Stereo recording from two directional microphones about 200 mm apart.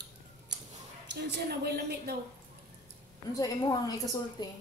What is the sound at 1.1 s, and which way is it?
A woman's voice, 55° right (ahead or behind).